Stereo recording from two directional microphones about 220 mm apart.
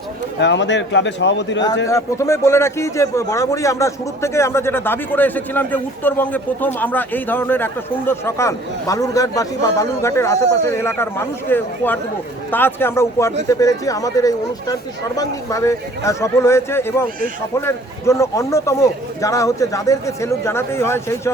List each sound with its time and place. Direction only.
0.3 s speech: 55° left (ahead or behind)
1.9 s a man's voice: 15° left (ahead or behind)